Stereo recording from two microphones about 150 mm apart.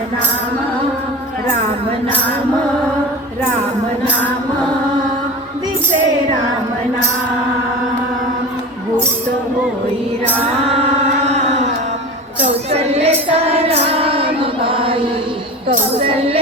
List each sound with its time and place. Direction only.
11.3 s carnatic music: 50° right (ahead or behind)
12.7 s music: 45° right (ahead or behind)
16.0 s music: 40° right (ahead or behind)